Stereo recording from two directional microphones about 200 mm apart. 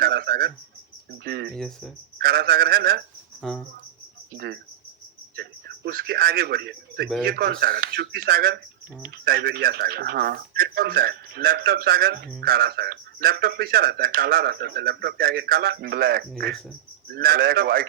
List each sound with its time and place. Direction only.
0.0 s cricket: 50° right (ahead or behind)
1.2 s speech: 50° right (ahead or behind)
1.5 s speech: centre (ahead or behind)
2.1 s speech: 50° right (ahead or behind)
3.4 s speech: centre (ahead or behind)
4.4 s speech: 55° right (ahead or behind)